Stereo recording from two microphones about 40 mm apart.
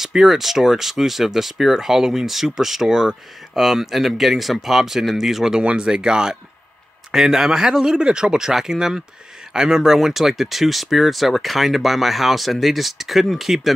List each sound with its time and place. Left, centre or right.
0.2 s speech: centre
5.8 s speech: right